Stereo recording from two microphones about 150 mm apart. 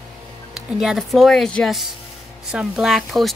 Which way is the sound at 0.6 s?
5° right (ahead or behind).